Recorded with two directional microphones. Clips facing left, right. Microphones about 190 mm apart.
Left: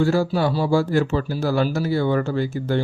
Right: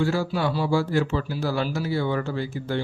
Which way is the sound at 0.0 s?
40° left (ahead or behind).